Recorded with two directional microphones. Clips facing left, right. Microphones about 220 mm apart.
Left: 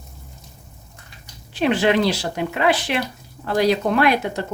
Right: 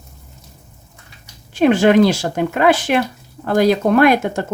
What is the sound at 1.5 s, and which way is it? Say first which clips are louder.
Speech: right 6 dB; 45° right (ahead or behind).